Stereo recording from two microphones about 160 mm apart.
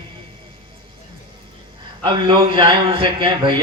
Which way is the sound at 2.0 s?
30° right (ahead or behind).